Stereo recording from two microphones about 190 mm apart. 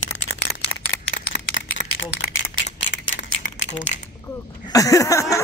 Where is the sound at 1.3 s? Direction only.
75° left (ahead or behind).